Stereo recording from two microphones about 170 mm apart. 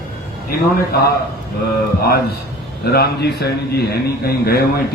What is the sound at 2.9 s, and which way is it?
A man's voice, 70° left (ahead or behind).